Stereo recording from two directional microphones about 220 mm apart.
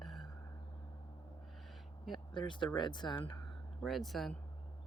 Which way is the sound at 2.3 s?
20° left (ahead or behind).